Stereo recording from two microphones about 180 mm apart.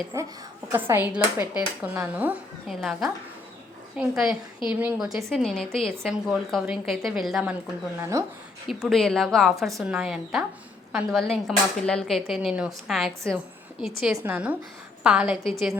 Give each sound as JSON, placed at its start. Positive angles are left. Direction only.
{"t": 0.1, "sound": "a woman's voice", "side_deg": -15}
{"t": 8.1, "sound": "speech", "side_deg": -15}
{"t": 8.6, "sound": "a woman's voice", "side_deg": 0}